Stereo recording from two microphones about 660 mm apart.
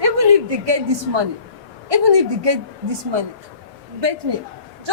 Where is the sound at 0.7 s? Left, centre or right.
Right.